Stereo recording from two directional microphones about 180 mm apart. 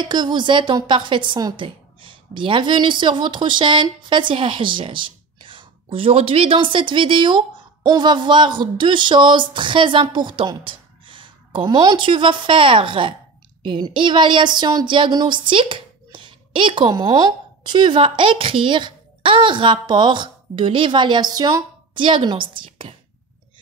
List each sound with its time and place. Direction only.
0.0 s speech: 25° right (ahead or behind)